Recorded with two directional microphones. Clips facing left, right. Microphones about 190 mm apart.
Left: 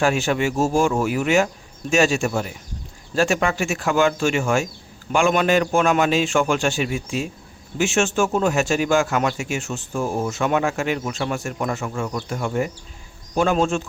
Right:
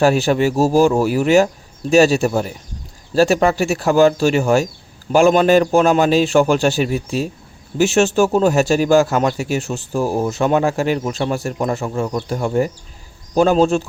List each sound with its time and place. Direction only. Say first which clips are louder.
0.0 s a man's voice: right 6 dB; 35° right (ahead or behind)